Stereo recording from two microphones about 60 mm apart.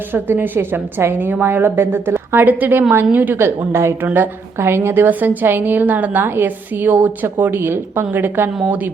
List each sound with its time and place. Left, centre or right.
0.1 s a woman's voice: right
2.3 s a woman's voice: right
3.7 s a woman's voice: right
4.0 s a woman's voice: right
5.0 s a woman's voice: right